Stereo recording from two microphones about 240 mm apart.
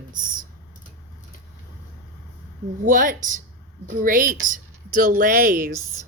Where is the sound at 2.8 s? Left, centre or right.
Right.